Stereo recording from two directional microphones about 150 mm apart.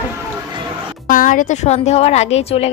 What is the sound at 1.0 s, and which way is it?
Speech, 65° left (ahead or behind).